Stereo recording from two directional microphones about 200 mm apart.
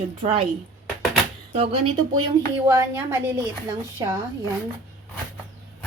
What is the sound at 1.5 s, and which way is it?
Speech, 30° right (ahead or behind).